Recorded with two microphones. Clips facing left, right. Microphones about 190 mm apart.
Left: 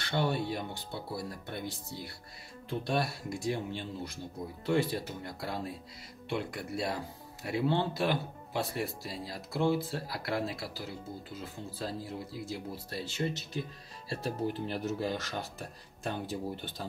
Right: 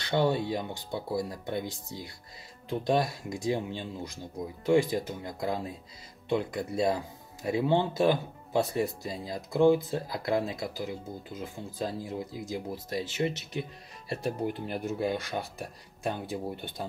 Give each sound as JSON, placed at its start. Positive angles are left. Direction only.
{"t": 0.0, "sound": "speech", "side_deg": -20}
{"t": 14.0, "sound": "speech", "side_deg": -15}